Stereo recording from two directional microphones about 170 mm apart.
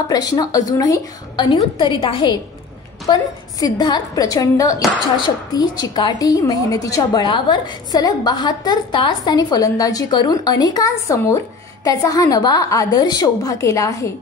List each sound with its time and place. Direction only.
0.1 s a woman's voice: 20° left (ahead or behind)